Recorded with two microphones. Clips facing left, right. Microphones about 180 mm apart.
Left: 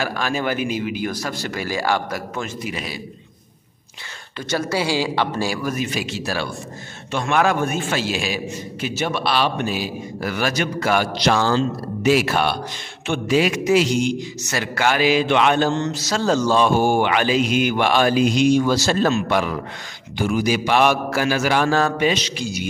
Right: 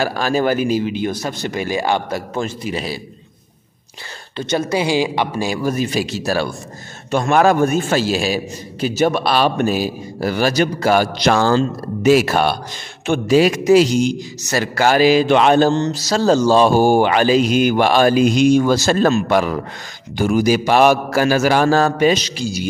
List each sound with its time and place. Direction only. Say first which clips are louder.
0.0 s speech: right 6 dB; 35° right (ahead or behind)
4.4 s speech: right 4 dB; 20° right (ahead or behind)
5.6 s a man's voice: right 5 dB; 30° right (ahead or behind)
11.1 s a man's voice: right 4 dB; 50° right (ahead or behind)